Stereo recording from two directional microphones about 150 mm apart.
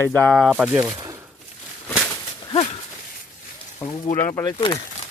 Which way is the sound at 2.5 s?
45° left (ahead or behind).